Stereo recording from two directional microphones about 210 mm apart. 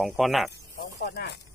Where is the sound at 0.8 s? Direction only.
50° left (ahead or behind).